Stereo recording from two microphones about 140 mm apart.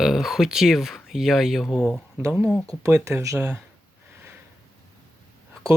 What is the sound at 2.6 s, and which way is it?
Speech, 20° right (ahead or behind).